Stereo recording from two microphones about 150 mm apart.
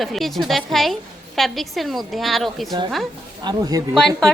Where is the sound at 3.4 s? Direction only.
25° right (ahead or behind).